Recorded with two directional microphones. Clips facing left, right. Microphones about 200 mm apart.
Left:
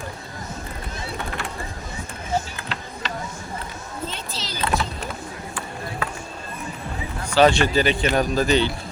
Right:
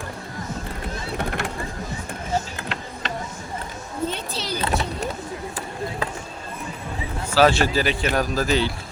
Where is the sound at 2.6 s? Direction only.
50° right (ahead or behind).